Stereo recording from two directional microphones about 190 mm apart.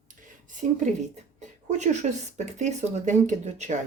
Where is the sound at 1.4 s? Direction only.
40° right (ahead or behind).